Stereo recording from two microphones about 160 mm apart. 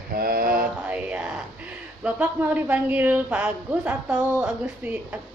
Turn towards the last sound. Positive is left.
turn(degrees=-10)  # may be behind; listen again after turning